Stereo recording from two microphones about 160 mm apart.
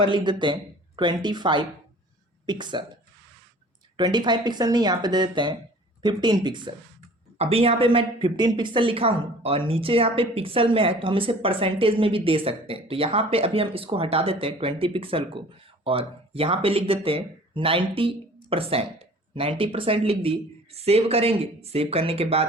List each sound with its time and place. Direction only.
0.0 s speech: 30° right (ahead or behind)
3.9 s a woman's voice: 30° right (ahead or behind)